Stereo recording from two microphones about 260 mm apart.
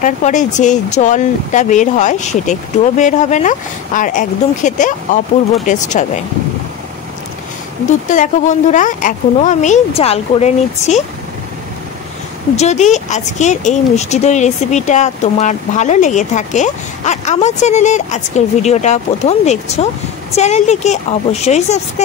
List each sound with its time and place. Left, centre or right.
0.0 s speech: left
8.1 s speech: left
12.5 s speech: left